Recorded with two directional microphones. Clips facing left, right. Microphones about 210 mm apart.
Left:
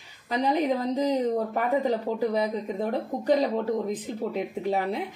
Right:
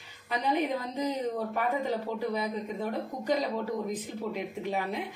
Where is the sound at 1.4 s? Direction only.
40° left (ahead or behind).